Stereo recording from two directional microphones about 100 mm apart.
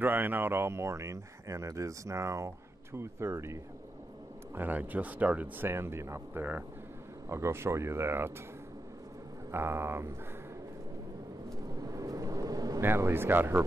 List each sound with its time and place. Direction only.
0.0 s speech: 20° right (ahead or behind)
4.6 s speech: 15° right (ahead or behind)
9.5 s speech: 25° right (ahead or behind)
11.8 s vehicle: 35° right (ahead or behind)
12.8 s speech: 25° right (ahead or behind)